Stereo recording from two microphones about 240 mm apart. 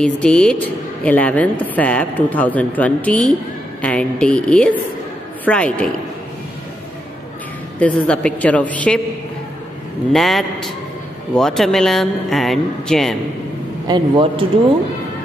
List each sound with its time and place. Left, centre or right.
0.0 s a woman's voice: centre
7.8 s a woman's voice: centre
10.1 s a woman's voice: centre
13.8 s a man's voice: centre